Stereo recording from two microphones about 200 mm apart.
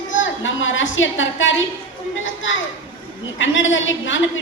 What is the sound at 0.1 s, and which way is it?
A woman's voice, 70° left (ahead or behind).